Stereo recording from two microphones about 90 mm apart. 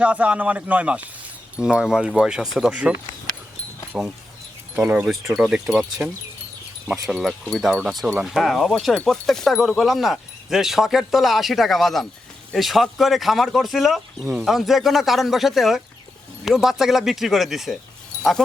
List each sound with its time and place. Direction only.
0.0 s speech: 15° right (ahead or behind)
3.9 s speech: 10° right (ahead or behind)
7.1 s speech: centre (ahead or behind)